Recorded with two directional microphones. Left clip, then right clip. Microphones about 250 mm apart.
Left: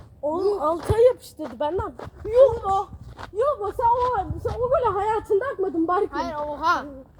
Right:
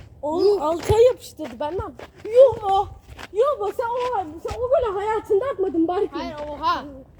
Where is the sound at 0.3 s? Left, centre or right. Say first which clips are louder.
Right 3 dB; right.